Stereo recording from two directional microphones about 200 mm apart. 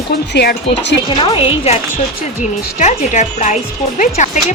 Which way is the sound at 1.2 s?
25° left (ahead or behind).